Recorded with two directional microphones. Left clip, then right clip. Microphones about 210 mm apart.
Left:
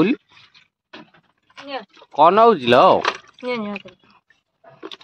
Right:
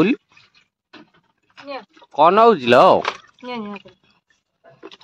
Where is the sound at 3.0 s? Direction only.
50° left (ahead or behind).